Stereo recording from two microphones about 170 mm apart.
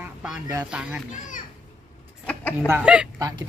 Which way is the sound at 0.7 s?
5° right (ahead or behind).